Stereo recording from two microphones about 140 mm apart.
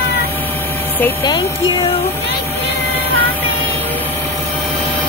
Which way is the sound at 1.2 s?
30° left (ahead or behind).